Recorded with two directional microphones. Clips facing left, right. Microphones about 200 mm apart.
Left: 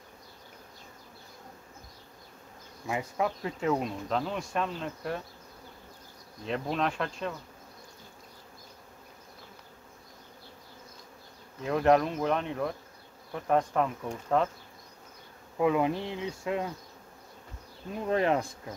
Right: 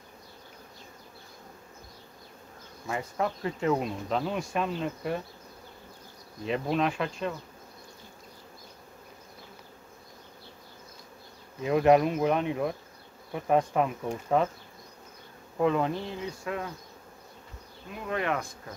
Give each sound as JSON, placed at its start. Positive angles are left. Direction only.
{"t": 2.9, "sound": "insect", "side_deg": 15}
{"t": 3.4, "sound": "speech", "side_deg": 0}
{"t": 6.4, "sound": "speech", "side_deg": -5}
{"t": 11.6, "sound": "speech", "side_deg": -5}
{"t": 15.5, "sound": "insect", "side_deg": 5}
{"t": 18.0, "sound": "speech", "side_deg": 30}